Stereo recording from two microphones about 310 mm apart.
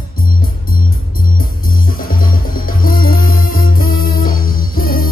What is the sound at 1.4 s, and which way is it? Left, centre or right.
Music, left.